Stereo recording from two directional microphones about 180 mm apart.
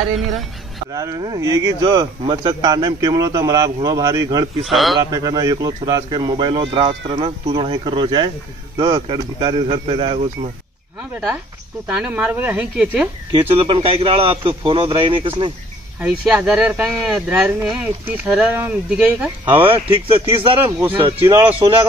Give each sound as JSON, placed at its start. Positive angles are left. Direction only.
{"t": 0.9, "sound": "speech", "side_deg": -20}
{"t": 4.6, "sound": "speech", "side_deg": 0}
{"t": 4.9, "sound": "speech", "side_deg": -20}
{"t": 11.0, "sound": "speech", "side_deg": -10}
{"t": 13.3, "sound": "speech", "side_deg": -30}
{"t": 16.0, "sound": "speech", "side_deg": -10}
{"t": 20.6, "sound": "speech", "side_deg": -10}